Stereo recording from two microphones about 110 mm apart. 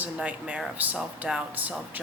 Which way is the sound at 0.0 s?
10° right (ahead or behind).